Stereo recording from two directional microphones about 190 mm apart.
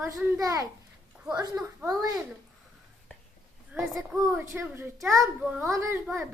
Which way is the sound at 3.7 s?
10° right (ahead or behind).